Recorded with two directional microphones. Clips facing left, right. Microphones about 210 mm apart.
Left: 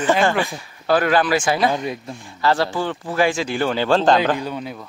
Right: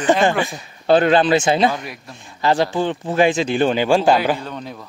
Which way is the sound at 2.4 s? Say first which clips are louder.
Right 2 dB; 20° right (ahead or behind).